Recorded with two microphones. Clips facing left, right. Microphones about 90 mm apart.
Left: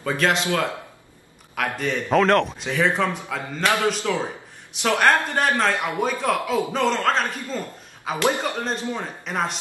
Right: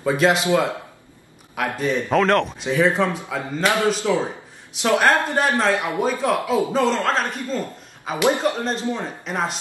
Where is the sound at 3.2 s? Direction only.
15° right (ahead or behind); by 7.2 s centre (ahead or behind).